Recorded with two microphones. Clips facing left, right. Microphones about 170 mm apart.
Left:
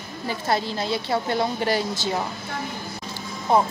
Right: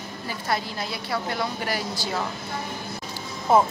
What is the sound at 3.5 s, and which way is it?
Speech, 5° right (ahead or behind).